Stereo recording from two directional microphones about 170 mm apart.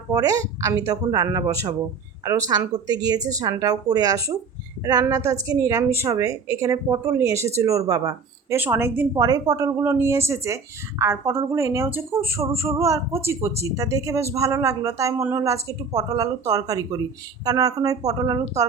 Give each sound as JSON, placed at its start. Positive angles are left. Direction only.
{"t": 0.1, "sound": "a woman's voice", "side_deg": -20}